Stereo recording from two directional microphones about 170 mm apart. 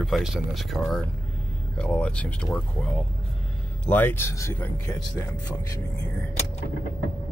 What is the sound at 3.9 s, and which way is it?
Speech, 10° left (ahead or behind).